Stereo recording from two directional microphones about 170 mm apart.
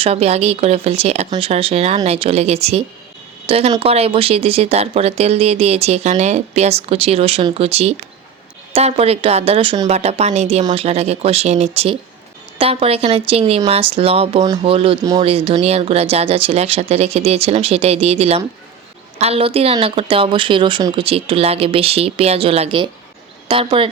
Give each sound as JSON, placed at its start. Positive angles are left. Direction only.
{"t": 0.0, "sound": "speech", "side_deg": -35}
{"t": 10.6, "sound": "speech", "side_deg": -25}
{"t": 10.8, "sound": "speech", "side_deg": -35}